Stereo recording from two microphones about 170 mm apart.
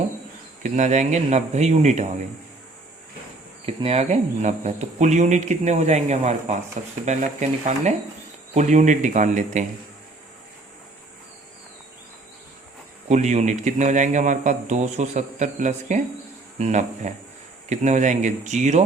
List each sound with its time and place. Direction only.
0.6 s speech: 45° right (ahead or behind)
3.8 s speech: 35° right (ahead or behind)
13.1 s speech: 45° right (ahead or behind)